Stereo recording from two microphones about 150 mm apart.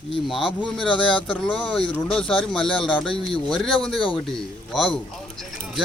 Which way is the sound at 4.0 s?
35° left (ahead or behind).